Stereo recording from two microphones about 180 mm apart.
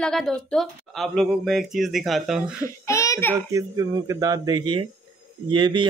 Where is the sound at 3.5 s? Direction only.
20° right (ahead or behind).